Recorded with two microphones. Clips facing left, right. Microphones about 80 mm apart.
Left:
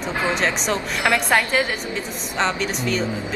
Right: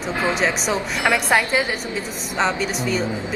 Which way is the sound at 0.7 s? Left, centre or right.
Centre.